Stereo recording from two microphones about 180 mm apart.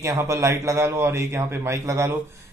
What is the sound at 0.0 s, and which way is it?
A man's voice, 15° right (ahead or behind).